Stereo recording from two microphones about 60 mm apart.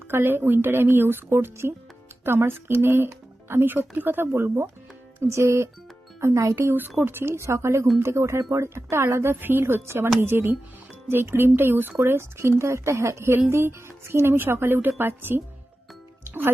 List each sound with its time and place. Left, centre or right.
0.1 s speech: right
6.6 s speech: right
16.2 s music: right